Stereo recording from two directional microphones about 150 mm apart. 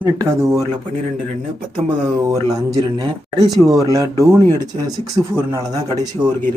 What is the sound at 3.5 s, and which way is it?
Speech, 20° right (ahead or behind).